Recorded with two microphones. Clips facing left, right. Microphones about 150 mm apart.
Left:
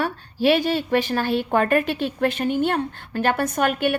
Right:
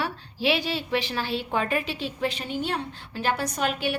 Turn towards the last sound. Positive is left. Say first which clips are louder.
# left 6 dB
turn(degrees=55)  # may be behind; listen again after turning